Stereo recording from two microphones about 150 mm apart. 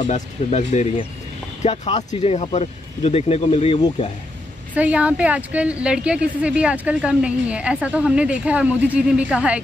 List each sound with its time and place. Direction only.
0.0 s speech: 50° left (ahead or behind)
4.7 s a woman's voice: 10° right (ahead or behind)